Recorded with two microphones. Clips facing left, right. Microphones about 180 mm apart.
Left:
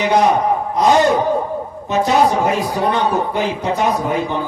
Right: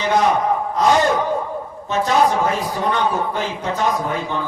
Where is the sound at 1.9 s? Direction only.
15° left (ahead or behind).